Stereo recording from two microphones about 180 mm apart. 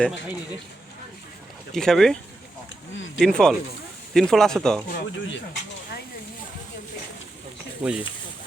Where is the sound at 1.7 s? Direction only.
Centre (ahead or behind).